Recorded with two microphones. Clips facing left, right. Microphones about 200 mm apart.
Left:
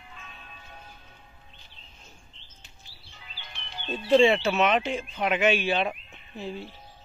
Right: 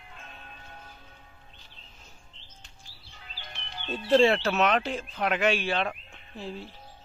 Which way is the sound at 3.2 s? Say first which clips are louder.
Right 2 dB; 45° right (ahead or behind).